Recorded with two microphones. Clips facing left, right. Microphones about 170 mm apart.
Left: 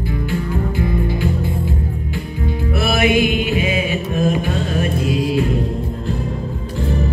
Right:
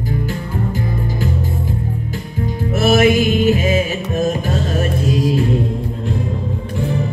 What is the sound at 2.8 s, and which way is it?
Music, 40° right (ahead or behind).